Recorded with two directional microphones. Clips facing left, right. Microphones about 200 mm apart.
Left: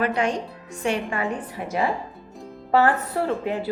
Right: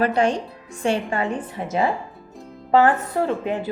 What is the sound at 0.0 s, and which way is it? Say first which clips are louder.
A woman's voice: right 3 dB; 30° right (ahead or behind).